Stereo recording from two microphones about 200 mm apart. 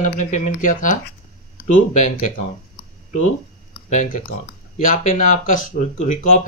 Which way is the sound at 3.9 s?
40° left (ahead or behind).